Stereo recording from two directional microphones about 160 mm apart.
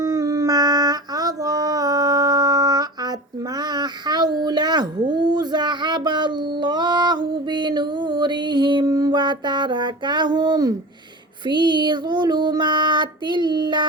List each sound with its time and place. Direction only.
0.0 s howl: 20° right (ahead or behind)
11.4 s child singing: 30° right (ahead or behind)